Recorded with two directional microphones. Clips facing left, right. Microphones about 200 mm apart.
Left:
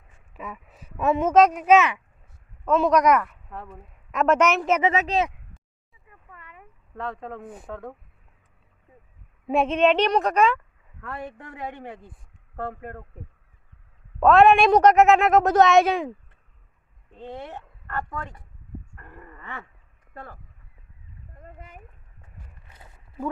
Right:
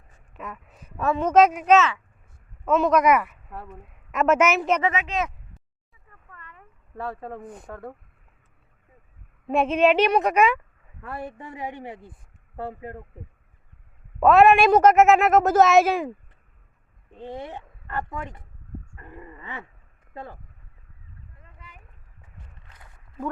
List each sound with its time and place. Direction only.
0.3 s speech: centre (ahead or behind)
0.9 s speech: 20° left (ahead or behind)
1.2 s speech: centre (ahead or behind)
1.7 s speech: 15° left (ahead or behind)
2.6 s a woman's voice: centre (ahead or behind)
4.9 s speech: 35° left (ahead or behind)
6.1 s a sound: 10° left (ahead or behind)
6.9 s a woman's voice: 5° right (ahead or behind)
7.4 s speech: 5° left (ahead or behind)
9.5 s a woman's voice: centre (ahead or behind)
14.2 s a woman's voice: 5° right (ahead or behind); by 20.4 s 20° right (ahead or behind)
21.3 s a sound: 45° left (ahead or behind)